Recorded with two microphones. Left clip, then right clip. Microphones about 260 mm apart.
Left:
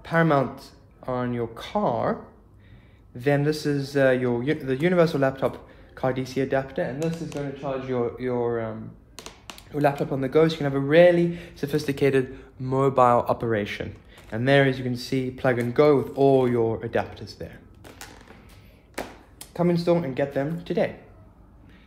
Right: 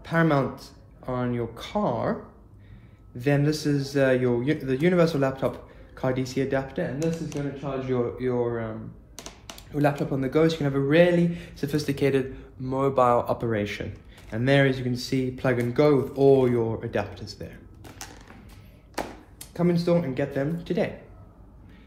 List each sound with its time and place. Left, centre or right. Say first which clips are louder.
0.0 s speech: left 2 dB; left
3.2 s speech: left 2 dB; left
9.1 s a sound: left 1 dB; centre
9.7 s speech: left 2 dB; left
19.3 s speech: left 2 dB; left